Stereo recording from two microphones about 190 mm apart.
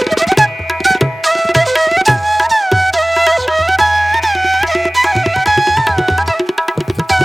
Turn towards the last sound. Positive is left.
turn(degrees=0)  # may be behind; listen again after turning